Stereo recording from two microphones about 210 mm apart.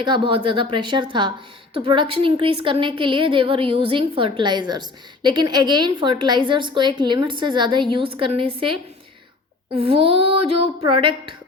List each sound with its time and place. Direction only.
0.0 s a woman's voice: 25° right (ahead or behind)
9.7 s a woman's voice: 25° right (ahead or behind)